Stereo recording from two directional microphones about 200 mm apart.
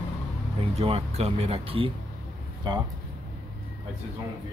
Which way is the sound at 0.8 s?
30° right (ahead or behind).